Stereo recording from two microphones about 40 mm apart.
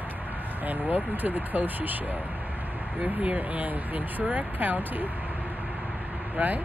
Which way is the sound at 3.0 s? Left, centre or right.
Right.